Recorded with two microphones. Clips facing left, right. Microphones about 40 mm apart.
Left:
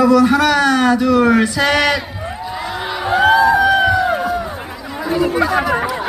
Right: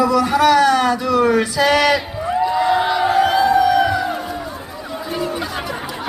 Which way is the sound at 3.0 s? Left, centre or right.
Left.